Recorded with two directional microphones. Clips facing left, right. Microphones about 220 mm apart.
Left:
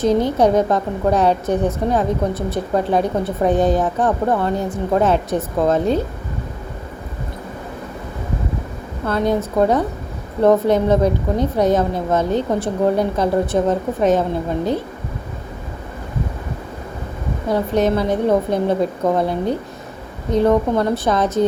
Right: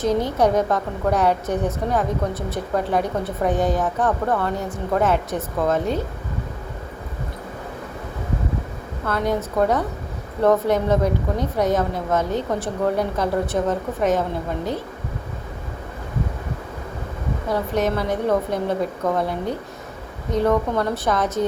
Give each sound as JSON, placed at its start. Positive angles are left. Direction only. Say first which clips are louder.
{"t": 0.3, "sound": "a woman's voice", "louder": "left 4 dB", "side_deg": 30}
{"t": 9.0, "sound": "a woman's voice", "louder": "left 4 dB", "side_deg": 25}
{"t": 17.5, "sound": "a woman's voice", "louder": "left 5 dB", "side_deg": 25}